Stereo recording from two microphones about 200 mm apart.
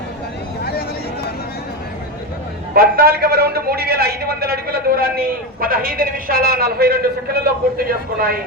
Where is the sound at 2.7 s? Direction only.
50° right (ahead or behind).